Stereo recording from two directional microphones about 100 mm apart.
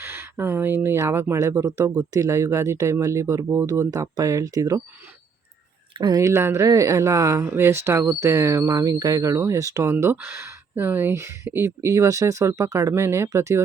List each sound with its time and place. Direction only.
0.0 s speech: 25° right (ahead or behind)
6.1 s speech: 30° right (ahead or behind)
10.0 s speech: 20° right (ahead or behind)